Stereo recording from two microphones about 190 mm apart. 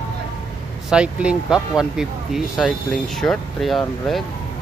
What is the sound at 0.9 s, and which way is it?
Speech, 5° right (ahead or behind).